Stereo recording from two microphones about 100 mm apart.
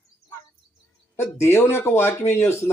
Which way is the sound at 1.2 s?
25° left (ahead or behind).